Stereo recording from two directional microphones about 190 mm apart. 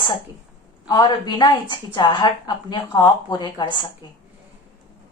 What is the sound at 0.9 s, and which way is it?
A woman's voice, 20° left (ahead or behind).